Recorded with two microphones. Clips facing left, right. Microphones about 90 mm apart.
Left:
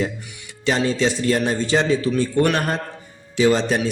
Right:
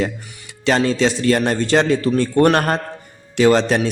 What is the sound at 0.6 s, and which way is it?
A man's voice, 80° right.